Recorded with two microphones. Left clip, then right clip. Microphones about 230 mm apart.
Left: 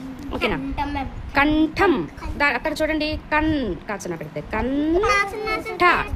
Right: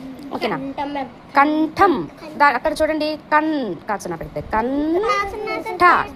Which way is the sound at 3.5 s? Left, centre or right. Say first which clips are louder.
Right 2 dB; left.